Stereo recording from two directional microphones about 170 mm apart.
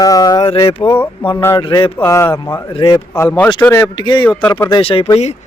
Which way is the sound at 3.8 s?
25° left (ahead or behind).